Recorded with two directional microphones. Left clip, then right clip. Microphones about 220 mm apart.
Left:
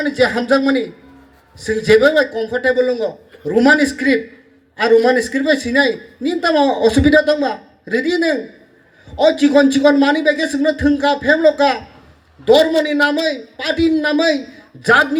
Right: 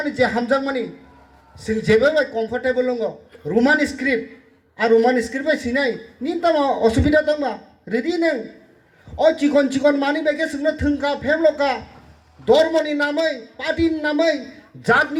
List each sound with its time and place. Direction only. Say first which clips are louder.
0.0 s a man's voice: left 4 dB; 50° left (ahead or behind)